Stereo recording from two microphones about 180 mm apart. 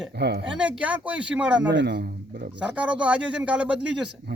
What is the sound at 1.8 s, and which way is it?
Speech, 65° right (ahead or behind).